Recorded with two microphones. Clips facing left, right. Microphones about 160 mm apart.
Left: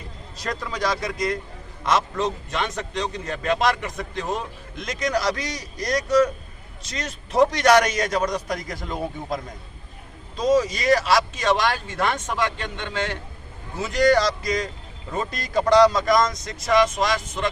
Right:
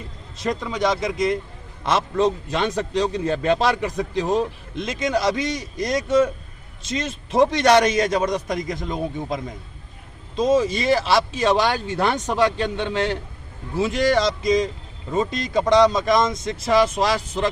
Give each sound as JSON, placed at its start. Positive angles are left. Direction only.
{"t": 0.3, "sound": "a man's voice", "side_deg": -25}
{"t": 10.3, "sound": "a man's voice", "side_deg": -25}